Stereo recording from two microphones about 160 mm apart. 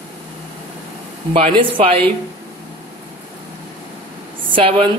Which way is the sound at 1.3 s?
35° right (ahead or behind).